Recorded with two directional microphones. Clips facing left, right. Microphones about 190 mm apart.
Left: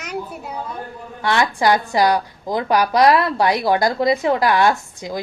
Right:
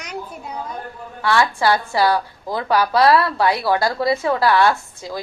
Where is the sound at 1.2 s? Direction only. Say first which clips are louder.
Even; 20° left (ahead or behind).